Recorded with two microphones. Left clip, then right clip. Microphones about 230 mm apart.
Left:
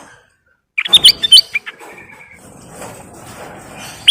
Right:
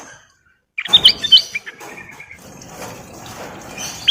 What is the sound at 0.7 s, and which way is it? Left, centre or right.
Chirp, left.